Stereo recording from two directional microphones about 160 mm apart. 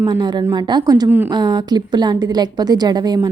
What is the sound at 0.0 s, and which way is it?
A woman's voice, 25° right (ahead or behind).